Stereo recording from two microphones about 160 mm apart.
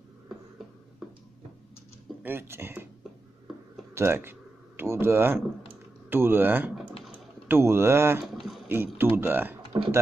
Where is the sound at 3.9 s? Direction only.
15° right (ahead or behind).